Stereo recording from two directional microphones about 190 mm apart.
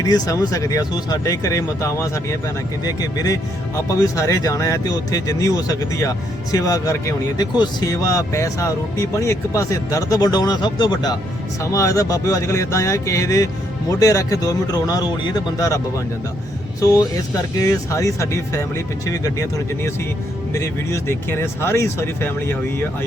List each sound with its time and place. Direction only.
0.0 s speech: 20° left (ahead or behind)
17.6 s speech: 15° left (ahead or behind)